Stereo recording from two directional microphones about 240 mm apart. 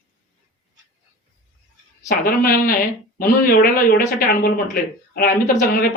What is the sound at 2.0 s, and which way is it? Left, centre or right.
A woman's voice, left.